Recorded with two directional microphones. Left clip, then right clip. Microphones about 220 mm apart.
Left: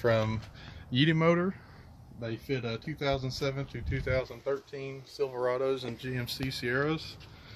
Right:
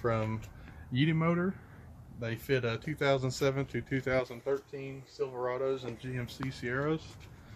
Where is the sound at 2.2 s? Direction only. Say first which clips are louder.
Right 3 dB; 40° right (ahead or behind).